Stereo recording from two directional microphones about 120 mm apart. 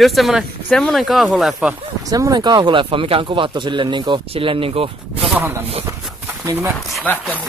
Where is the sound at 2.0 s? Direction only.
30° right (ahead or behind); by 4.9 s 50° right (ahead or behind).